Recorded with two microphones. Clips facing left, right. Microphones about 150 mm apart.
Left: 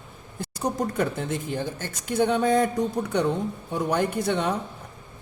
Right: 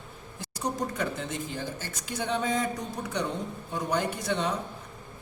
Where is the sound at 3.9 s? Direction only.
55° left (ahead or behind).